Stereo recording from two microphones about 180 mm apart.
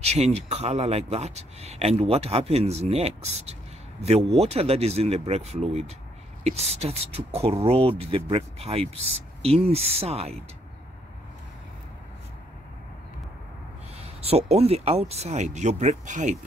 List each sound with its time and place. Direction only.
0.0 s speech: 35° right (ahead or behind)
13.9 s speech: 35° right (ahead or behind)